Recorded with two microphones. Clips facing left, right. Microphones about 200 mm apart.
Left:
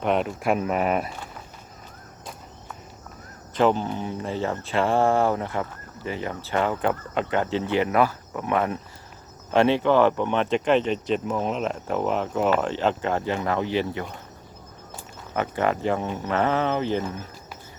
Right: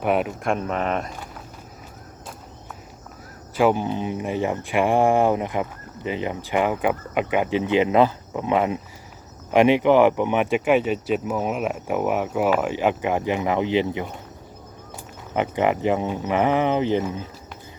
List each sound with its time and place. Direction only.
0.0 s speech: 5° right (ahead or behind)
0.4 s speech: 5° left (ahead or behind)
3.5 s speech: 10° right (ahead or behind)
15.3 s speech: 15° right (ahead or behind)